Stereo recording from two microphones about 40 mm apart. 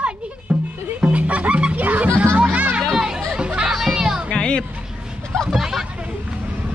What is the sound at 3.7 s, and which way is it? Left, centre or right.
Music, centre.